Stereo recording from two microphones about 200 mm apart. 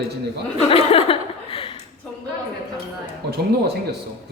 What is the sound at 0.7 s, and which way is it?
Chuckle, 30° left (ahead or behind).